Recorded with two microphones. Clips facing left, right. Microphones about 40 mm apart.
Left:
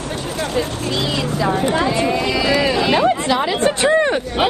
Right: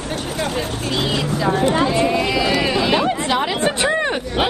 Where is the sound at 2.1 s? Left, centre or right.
Right.